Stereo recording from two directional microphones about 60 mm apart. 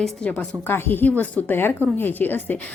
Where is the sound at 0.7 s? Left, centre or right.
Left.